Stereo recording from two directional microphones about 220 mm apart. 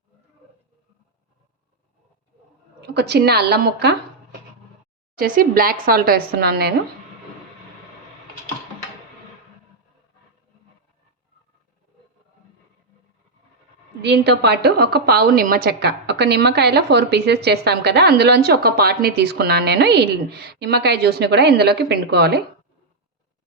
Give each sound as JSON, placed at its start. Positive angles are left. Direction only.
{"t": 2.8, "sound": "a woman's voice", "side_deg": -50}
{"t": 5.1, "sound": "speech", "side_deg": -40}
{"t": 14.0, "sound": "a woman's voice", "side_deg": -50}